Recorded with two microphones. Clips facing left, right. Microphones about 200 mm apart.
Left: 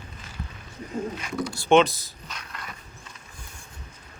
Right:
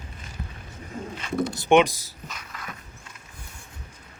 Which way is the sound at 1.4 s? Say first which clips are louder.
Even; 20° right (ahead or behind).